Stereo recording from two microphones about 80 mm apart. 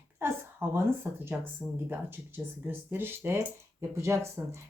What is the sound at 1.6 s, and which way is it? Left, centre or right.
Speech, centre.